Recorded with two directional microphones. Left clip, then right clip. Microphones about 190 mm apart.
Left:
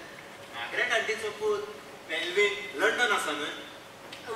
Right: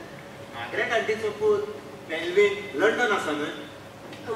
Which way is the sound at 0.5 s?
15° right (ahead or behind).